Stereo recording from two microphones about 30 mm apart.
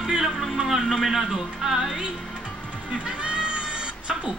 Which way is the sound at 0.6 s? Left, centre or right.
Centre.